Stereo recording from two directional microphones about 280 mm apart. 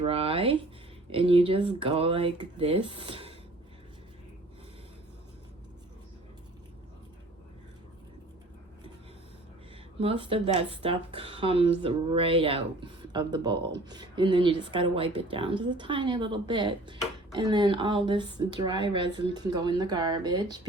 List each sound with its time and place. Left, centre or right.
0.0 s speech: centre
10.0 s speech: centre